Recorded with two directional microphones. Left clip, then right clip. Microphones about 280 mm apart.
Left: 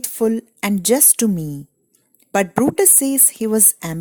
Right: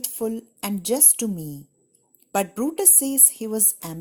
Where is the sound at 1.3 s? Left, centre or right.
Left.